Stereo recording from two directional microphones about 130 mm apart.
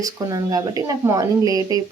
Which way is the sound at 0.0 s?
25° right (ahead or behind).